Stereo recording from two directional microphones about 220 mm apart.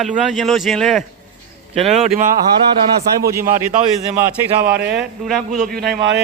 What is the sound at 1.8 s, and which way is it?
Speech, 30° right (ahead or behind).